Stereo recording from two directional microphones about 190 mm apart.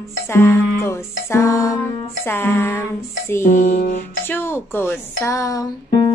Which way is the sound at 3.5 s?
40° left (ahead or behind).